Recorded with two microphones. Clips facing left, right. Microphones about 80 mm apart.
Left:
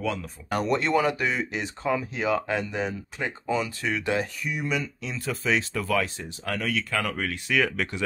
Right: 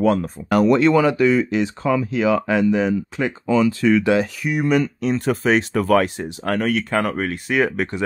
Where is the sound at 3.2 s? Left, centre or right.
Right.